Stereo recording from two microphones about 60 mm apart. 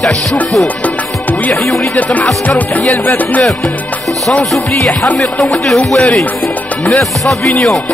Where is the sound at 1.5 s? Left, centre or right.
Left.